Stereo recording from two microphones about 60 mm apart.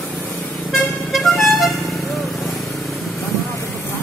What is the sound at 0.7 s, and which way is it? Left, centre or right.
Vehicle, centre.